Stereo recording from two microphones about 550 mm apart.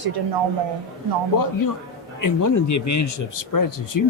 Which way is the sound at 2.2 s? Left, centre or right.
Left.